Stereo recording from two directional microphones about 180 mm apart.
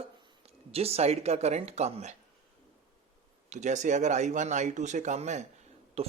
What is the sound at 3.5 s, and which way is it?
Speech, 40° right (ahead or behind).